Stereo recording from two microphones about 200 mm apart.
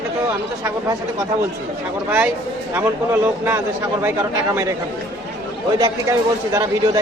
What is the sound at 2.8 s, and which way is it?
Speech, 10° right (ahead or behind).